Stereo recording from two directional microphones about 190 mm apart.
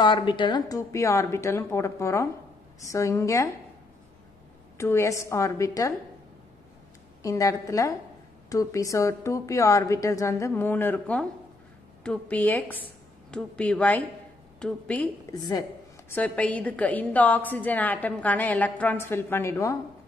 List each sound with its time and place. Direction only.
0.0 s a woman's voice: 25° left (ahead or behind)
4.7 s a woman's voice: 15° left (ahead or behind)
7.2 s a woman's voice: 15° left (ahead or behind)
15.3 s a woman's voice: 20° left (ahead or behind)
16.1 s a woman's voice: 10° left (ahead or behind)